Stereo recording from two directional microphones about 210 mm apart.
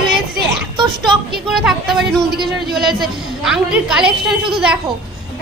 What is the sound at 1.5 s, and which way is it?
A woman's voice, centre (ahead or behind).